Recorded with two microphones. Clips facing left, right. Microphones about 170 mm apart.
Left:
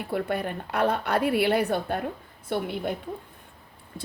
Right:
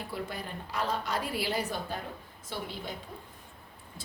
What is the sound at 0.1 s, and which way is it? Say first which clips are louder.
A woman's voice: left 14 dB; 60° left (ahead or behind).